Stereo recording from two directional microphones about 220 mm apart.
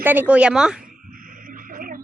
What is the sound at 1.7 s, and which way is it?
Music, 40° right (ahead or behind).